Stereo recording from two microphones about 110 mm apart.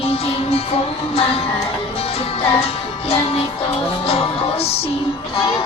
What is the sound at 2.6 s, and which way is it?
Music, 65° left (ahead or behind).